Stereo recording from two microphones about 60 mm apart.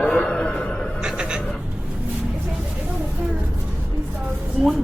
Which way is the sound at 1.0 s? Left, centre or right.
Centre.